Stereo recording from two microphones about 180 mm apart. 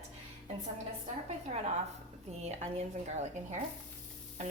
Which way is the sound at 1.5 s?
40° right (ahead or behind).